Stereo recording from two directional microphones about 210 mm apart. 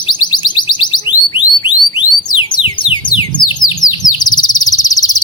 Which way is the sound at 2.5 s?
25° left (ahead or behind).